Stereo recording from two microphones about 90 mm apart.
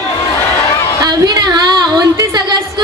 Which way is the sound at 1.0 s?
50° right (ahead or behind).